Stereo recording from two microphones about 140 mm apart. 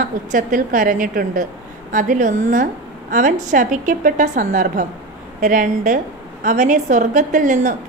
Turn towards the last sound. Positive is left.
turn(degrees=-65)  # may be behind; listen again after turning